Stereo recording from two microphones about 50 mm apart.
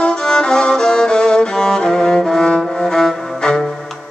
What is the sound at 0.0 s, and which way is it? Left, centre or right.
Music, centre.